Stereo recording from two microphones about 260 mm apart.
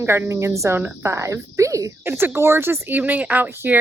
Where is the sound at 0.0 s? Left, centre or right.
Centre.